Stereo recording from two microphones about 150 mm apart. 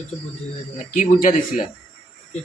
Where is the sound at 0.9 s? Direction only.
60° left (ahead or behind).